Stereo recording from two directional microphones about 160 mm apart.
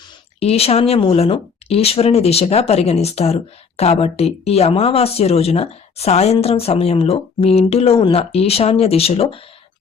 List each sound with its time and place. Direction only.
0.3 s speech: 40° left (ahead or behind)